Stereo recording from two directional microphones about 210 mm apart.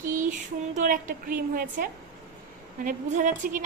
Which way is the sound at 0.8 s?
40° right (ahead or behind).